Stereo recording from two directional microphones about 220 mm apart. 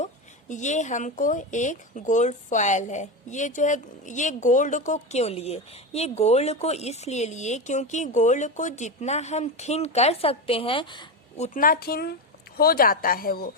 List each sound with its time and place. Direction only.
0.0 s speech: 35° left (ahead or behind)